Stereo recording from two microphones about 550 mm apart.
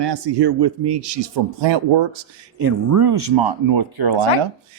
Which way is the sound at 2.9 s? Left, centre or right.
Right.